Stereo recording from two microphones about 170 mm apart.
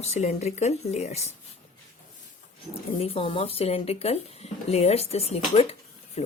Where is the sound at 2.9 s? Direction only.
35° left (ahead or behind).